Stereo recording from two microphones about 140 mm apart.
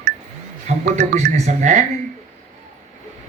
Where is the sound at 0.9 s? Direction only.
55° right (ahead or behind).